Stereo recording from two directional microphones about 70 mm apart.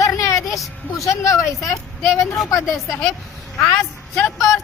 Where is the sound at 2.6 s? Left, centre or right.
Centre.